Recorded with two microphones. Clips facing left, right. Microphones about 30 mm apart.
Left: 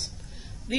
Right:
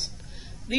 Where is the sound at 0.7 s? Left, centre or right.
Right.